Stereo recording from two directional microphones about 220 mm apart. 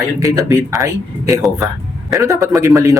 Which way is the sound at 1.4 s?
Centre (ahead or behind).